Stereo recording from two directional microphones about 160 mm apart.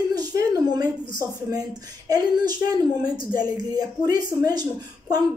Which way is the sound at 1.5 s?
25° right (ahead or behind).